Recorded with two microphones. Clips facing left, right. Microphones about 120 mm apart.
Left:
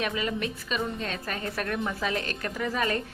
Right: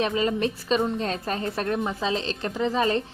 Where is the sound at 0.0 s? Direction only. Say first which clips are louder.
Right 6 dB; 30° right (ahead or behind).